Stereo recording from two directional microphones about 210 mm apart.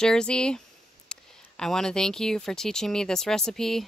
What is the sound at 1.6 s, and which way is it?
Speech, centre (ahead or behind).